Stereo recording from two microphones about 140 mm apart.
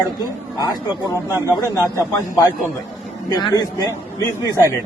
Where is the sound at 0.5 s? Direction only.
30° left (ahead or behind).